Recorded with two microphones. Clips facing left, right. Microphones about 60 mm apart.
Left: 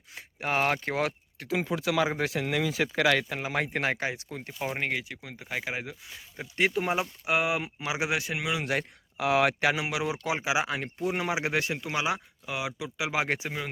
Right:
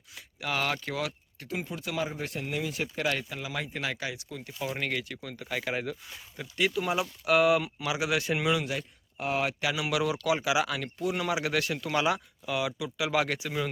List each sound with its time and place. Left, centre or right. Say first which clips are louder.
0.1 s speech: left 3 dB; left
1.5 s speech: left 6 dB; left
4.6 s speech: left 1 dB; left
6.6 s speech: left 1 dB; left
7.3 s speech: right 5 dB; centre
8.2 s speech: right 4 dB; centre
8.6 s speech: left 4 dB; left
9.1 s speech: left 5 dB; left
9.9 s speech: right 2 dB; left
13.2 s speech: left 2 dB; left